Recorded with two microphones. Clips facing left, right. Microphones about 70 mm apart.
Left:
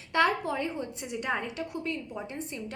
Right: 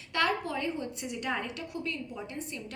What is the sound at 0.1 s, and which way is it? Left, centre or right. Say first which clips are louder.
A woman's voice: left 4 dB; left.